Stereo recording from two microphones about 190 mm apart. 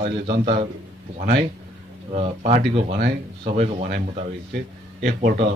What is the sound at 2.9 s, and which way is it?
Speech, 60° right (ahead or behind).